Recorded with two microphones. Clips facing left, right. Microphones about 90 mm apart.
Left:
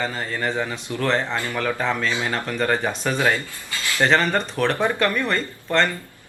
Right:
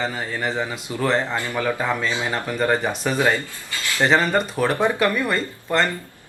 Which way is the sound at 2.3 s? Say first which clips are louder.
Right 4 dB; 10° right (ahead or behind).